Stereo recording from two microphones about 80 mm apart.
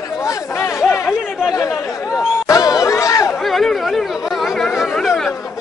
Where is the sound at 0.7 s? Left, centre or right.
Centre.